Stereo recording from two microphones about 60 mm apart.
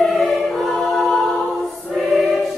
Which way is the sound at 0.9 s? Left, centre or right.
Centre.